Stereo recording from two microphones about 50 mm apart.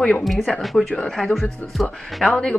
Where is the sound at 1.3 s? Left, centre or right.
Centre.